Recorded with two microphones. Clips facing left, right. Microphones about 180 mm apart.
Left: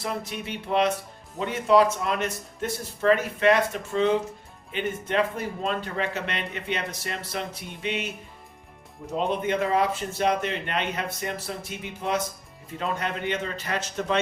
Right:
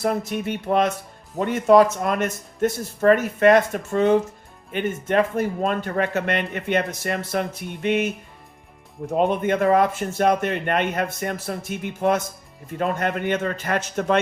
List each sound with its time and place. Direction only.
0.0 s speech: 50° right (ahead or behind)
9.1 s speech: 55° right (ahead or behind)